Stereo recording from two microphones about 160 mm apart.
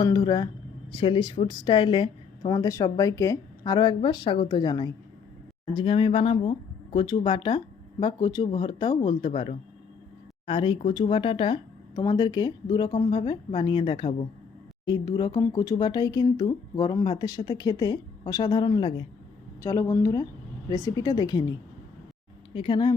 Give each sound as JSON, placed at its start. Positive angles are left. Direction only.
{"t": 0.0, "sound": "speech", "side_deg": 25}
{"t": 19.6, "sound": "speech", "side_deg": 20}
{"t": 22.5, "sound": "speech", "side_deg": 30}